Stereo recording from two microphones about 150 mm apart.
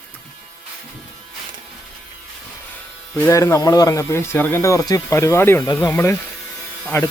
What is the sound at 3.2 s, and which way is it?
Speech, 20° left (ahead or behind).